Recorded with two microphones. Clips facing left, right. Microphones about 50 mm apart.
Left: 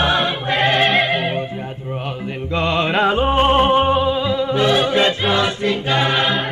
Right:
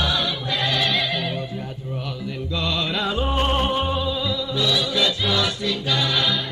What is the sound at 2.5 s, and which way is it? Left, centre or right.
Music, left.